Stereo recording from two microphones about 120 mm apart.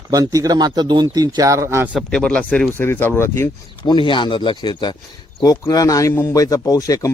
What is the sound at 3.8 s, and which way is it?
A man's voice, 45° left (ahead or behind).